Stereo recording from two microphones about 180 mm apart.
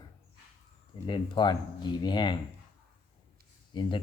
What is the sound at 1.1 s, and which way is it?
Speech, 25° left (ahead or behind).